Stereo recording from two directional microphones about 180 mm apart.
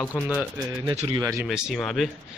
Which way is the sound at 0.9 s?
25° right (ahead or behind).